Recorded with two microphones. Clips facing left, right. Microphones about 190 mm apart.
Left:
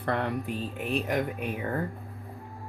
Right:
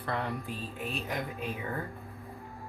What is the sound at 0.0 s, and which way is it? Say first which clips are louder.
Speech: left 5 dB; 60° left (ahead or behind).